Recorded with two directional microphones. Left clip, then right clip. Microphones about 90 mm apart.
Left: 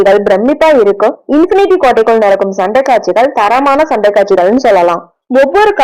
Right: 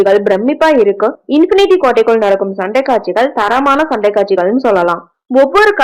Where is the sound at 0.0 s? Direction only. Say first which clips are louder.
Left 3 dB; 5° left (ahead or behind).